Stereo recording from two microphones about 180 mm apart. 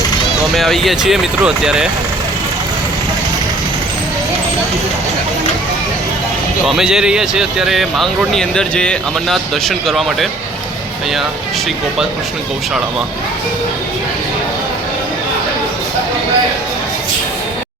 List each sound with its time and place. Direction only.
0.5 s speech: centre (ahead or behind)
6.7 s speech: 5° right (ahead or behind)